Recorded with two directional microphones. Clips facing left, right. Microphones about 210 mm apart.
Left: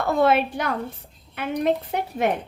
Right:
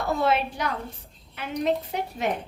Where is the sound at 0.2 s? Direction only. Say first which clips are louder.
Left 8 dB; 55° left (ahead or behind).